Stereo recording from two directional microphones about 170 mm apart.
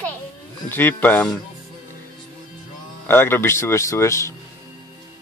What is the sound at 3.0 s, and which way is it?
Speech, 15° left (ahead or behind).